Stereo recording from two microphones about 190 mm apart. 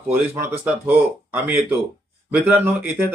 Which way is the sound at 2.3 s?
10° right (ahead or behind).